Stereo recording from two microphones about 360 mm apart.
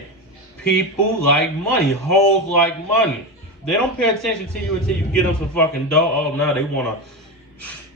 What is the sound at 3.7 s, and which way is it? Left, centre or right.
Speech, centre.